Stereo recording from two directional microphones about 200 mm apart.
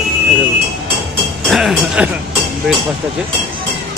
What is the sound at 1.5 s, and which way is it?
Speech, centre (ahead or behind).